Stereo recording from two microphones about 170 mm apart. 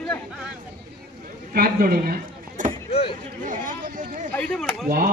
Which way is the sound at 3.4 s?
50° right (ahead or behind).